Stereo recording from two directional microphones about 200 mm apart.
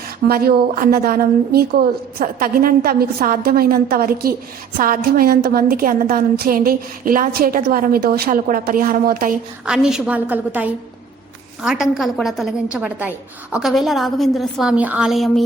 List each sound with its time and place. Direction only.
0.3 s a woman's voice: 50° right (ahead or behind)
9.6 s a woman's voice: 5° right (ahead or behind)